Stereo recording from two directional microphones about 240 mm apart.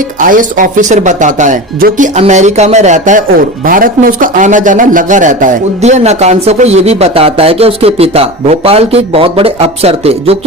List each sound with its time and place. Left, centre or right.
0.2 s speech: right